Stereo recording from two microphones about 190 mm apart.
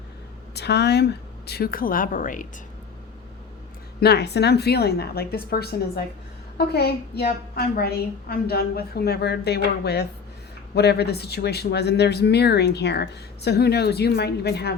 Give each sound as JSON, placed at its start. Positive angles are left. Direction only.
{"t": 0.5, "sound": "speech", "side_deg": 60}
{"t": 4.0, "sound": "speech", "side_deg": 60}